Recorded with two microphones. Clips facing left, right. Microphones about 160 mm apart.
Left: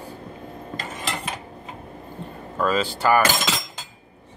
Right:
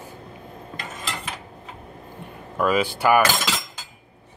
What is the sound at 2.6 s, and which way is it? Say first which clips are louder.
Speech: right 1 dB; 10° right (ahead or behind).